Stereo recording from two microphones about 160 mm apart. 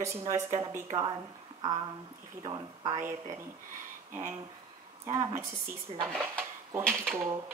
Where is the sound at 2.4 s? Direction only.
25° right (ahead or behind).